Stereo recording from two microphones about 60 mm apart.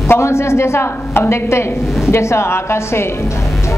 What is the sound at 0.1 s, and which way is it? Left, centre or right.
A woman's voice, left.